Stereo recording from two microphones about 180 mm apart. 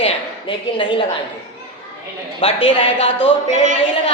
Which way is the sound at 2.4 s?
30° left (ahead or behind).